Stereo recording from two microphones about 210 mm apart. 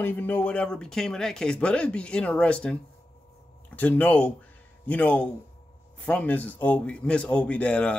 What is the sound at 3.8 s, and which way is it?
Speech, 5° left (ahead or behind).